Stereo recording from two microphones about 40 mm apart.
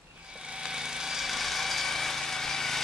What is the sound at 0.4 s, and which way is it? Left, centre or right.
Vehicle, centre.